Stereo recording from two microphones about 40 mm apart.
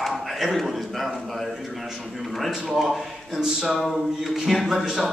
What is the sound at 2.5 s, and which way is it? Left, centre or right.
Speech, centre.